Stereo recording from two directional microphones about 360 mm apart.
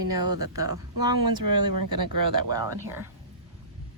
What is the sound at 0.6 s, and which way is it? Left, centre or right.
Speech, right.